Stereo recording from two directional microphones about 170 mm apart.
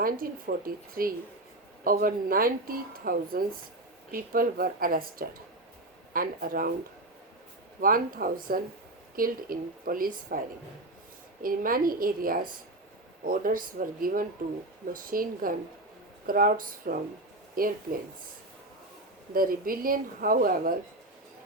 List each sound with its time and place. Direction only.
0.0 s speech: 55° right (ahead or behind)
7.8 s speech: 55° right (ahead or behind)
11.4 s speech: 55° right (ahead or behind)
19.3 s speech: 55° right (ahead or behind)